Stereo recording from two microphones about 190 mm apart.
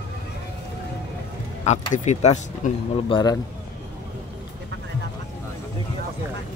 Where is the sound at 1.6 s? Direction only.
40° left (ahead or behind).